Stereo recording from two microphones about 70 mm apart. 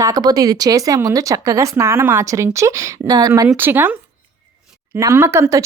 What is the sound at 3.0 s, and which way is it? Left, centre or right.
Speech, right.